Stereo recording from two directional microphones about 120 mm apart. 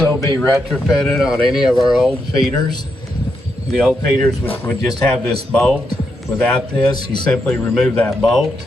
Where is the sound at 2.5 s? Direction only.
35° left (ahead or behind).